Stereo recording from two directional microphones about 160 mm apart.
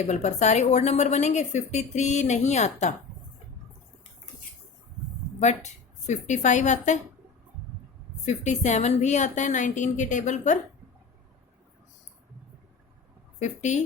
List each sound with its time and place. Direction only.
0.1 s a woman's voice: 45° left (ahead or behind)
5.4 s a woman's voice: 45° left (ahead or behind)
8.2 s a woman's voice: 45° left (ahead or behind)
13.4 s a woman's voice: 45° left (ahead or behind)